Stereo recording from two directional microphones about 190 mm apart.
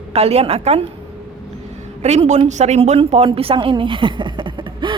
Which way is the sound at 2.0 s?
35° right (ahead or behind).